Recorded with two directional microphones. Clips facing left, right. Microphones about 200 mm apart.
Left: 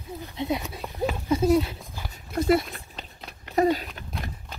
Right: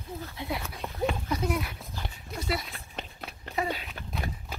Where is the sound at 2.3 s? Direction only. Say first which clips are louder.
Left 12 dB; 50° left (ahead or behind).